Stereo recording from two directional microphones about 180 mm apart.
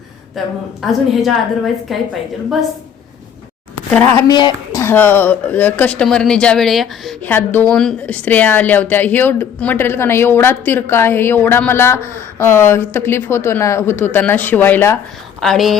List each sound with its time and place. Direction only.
0.3 s a woman's voice: centre (ahead or behind)
4.1 s speech: 25° left (ahead or behind)
4.8 s speech: 10° left (ahead or behind)
15.4 s a woman's voice: centre (ahead or behind)